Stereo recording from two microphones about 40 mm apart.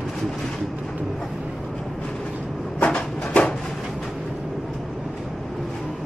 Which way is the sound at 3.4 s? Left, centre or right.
Left.